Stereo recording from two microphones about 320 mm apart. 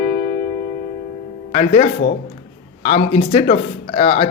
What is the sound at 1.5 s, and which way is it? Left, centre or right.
Speech, left.